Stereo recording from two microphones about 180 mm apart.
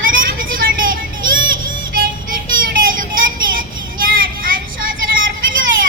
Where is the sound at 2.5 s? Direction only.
50° right (ahead or behind).